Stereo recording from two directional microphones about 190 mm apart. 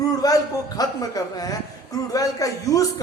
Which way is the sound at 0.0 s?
20° left (ahead or behind).